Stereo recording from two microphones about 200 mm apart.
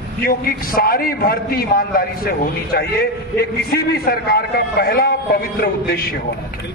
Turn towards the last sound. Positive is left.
turn(degrees=50)  # may be behind; listen again after turning